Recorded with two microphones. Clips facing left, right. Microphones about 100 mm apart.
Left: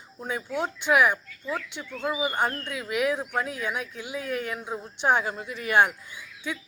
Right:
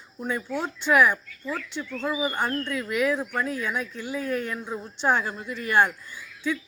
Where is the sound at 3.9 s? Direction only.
10° left (ahead or behind).